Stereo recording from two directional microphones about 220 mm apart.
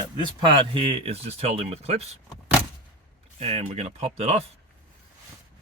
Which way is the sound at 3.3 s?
30° right (ahead or behind).